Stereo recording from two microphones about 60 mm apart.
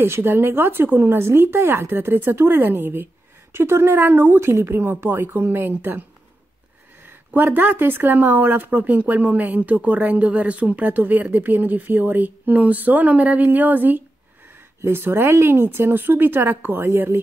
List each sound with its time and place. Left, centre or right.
0.0 s speech: right